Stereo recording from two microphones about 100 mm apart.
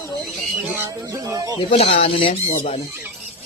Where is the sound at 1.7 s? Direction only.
80° left.